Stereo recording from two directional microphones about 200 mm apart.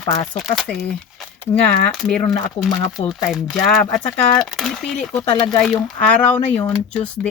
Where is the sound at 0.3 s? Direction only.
Centre (ahead or behind).